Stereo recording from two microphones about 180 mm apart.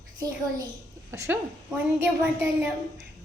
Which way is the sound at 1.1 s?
15° right (ahead or behind).